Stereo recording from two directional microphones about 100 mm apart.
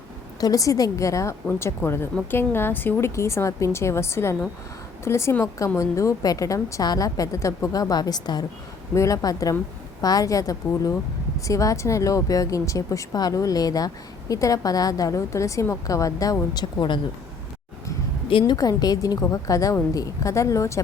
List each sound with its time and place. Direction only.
0.3 s speech: 35° left (ahead or behind)
18.3 s a woman's voice: 60° left (ahead or behind)
18.5 s speech: 35° left (ahead or behind)